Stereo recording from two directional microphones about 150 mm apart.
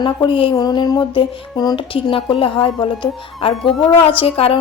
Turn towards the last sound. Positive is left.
turn(degrees=40)  # may be behind; listen again after turning